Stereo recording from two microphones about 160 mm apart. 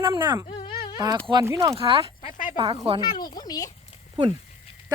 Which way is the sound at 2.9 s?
25° left (ahead or behind).